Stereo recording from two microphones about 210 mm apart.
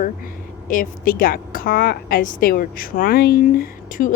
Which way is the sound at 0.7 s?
40° left (ahead or behind).